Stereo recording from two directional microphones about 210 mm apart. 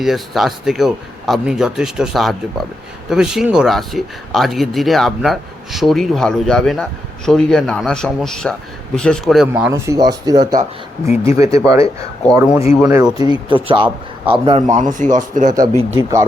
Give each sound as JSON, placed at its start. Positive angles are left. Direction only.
{"t": 0.0, "sound": "a man's voice", "side_deg": 0}
{"t": 12.5, "sound": "speech", "side_deg": 30}
{"t": 12.8, "sound": "a man's voice", "side_deg": -5}
{"t": 13.1, "sound": "speech", "side_deg": 25}
{"t": 13.5, "sound": "a man's voice", "side_deg": -25}
{"t": 16.0, "sound": "a man's voice", "side_deg": -15}